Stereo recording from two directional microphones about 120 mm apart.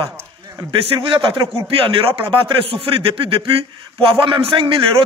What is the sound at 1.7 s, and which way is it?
A man's voice, 50° right (ahead or behind).